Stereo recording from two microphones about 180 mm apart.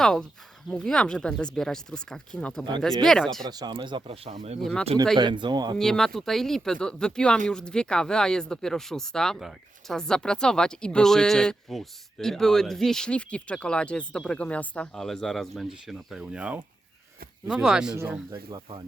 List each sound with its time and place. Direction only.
0.0 s speech: 5° left (ahead or behind)
3.5 s speech: 25° right (ahead or behind)
4.6 s speech: 5° left (ahead or behind)
5.1 s speech: 25° right (ahead or behind)
5.7 s speech: centre (ahead or behind)
17.6 s speech: 5° right (ahead or behind)
17.9 s speech: 15° right (ahead or behind)